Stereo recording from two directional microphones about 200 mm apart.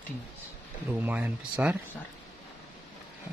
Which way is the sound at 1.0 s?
10° right (ahead or behind).